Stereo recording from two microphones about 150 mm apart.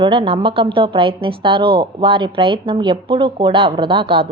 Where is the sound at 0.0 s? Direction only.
35° right (ahead or behind).